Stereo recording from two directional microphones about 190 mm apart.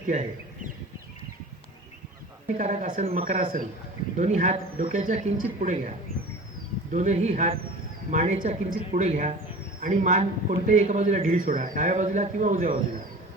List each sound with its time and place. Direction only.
0.1 s speech: 40° right (ahead or behind)
2.6 s a man's voice: 40° right (ahead or behind)
6.9 s a man's voice: 40° right (ahead or behind)